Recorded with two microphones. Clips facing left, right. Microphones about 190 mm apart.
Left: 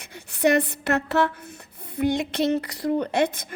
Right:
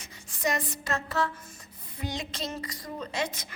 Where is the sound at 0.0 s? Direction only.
65° left (ahead or behind).